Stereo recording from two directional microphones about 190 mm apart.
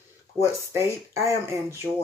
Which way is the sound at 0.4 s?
15° right (ahead or behind).